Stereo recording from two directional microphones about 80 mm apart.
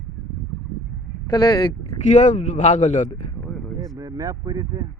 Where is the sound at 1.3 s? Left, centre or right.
Left.